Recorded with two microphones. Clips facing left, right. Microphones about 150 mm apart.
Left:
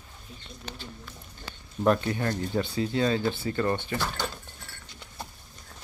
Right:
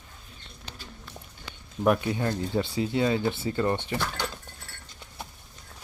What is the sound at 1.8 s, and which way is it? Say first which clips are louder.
Speech: even; 10° right (ahead or behind).